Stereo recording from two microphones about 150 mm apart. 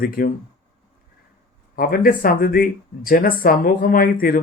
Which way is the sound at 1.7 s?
70° left (ahead or behind).